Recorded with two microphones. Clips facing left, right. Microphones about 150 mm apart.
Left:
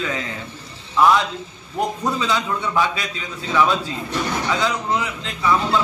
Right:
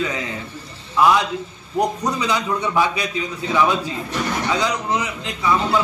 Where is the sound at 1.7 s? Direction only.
15° right (ahead or behind).